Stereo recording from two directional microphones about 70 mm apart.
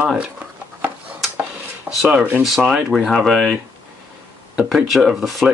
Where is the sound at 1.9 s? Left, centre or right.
Right.